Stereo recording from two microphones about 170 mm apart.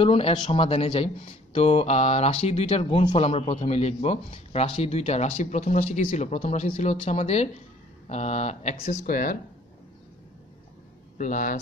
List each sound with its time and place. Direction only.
0.0 s speech: 30° left (ahead or behind)
9.0 s speech: 55° left (ahead or behind)
11.1 s speech: 50° left (ahead or behind)